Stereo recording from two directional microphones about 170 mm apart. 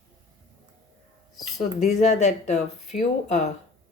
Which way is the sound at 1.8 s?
45° left (ahead or behind).